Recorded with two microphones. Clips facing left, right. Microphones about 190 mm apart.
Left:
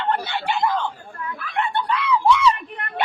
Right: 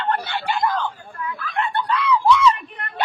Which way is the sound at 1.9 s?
5° left (ahead or behind).